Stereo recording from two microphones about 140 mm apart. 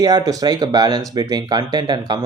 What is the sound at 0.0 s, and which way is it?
A man's voice, 25° right (ahead or behind).